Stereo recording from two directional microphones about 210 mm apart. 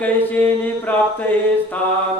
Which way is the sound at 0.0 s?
10° left (ahead or behind).